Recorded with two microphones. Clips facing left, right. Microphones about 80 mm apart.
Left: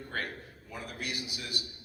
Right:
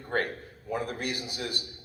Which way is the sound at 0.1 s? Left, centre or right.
Right.